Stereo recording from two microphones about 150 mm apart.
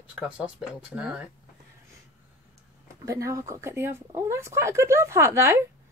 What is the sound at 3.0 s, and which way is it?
A child's voice, 20° right (ahead or behind).